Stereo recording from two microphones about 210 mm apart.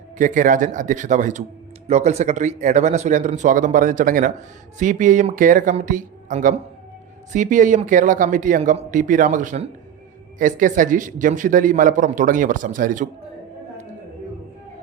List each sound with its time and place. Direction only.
0.2 s a man's voice: 40° right (ahead or behind)